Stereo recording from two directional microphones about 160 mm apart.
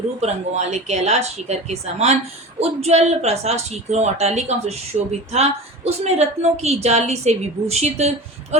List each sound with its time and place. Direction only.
0.2 s speech: 45° right (ahead or behind)